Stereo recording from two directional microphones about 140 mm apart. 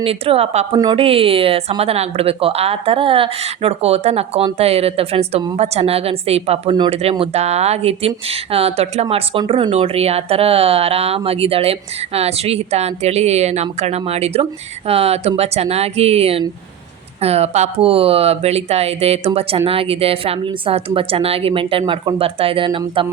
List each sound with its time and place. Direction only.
0.0 s speech: 45° right (ahead or behind)